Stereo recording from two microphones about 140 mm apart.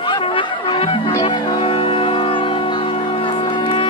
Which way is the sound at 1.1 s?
30° left (ahead or behind).